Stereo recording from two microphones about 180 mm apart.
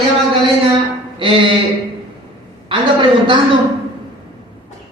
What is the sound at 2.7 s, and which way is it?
Speech, 25° right (ahead or behind).